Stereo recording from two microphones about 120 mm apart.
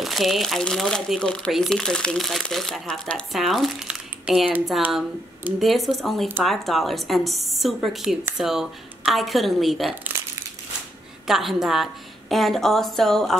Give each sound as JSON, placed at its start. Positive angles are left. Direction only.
{"t": 0.0, "sound": "speech", "side_deg": 0}
{"t": 10.1, "sound": "crushing", "side_deg": -20}
{"t": 11.2, "sound": "speech", "side_deg": 0}